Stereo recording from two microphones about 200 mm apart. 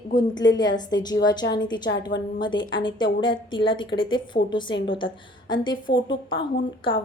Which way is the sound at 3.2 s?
25° left (ahead or behind).